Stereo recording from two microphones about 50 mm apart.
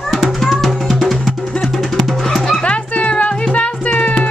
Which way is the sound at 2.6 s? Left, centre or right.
Left.